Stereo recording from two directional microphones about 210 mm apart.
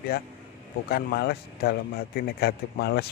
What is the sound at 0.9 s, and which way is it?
A man's voice, 50° left (ahead or behind).